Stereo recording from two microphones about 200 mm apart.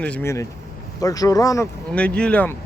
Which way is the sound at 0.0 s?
10° left (ahead or behind).